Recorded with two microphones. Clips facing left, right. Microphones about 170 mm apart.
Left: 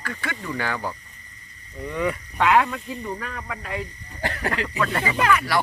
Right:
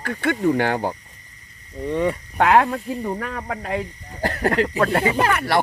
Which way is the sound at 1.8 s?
30° right (ahead or behind).